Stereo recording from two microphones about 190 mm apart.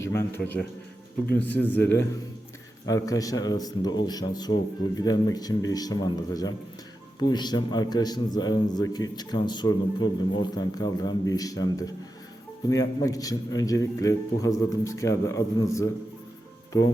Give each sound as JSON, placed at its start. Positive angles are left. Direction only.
{"t": 0.0, "sound": "a man's voice", "side_deg": 15}